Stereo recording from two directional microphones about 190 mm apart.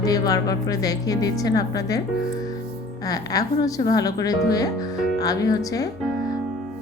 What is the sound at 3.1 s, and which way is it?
Speech, 20° left (ahead or behind).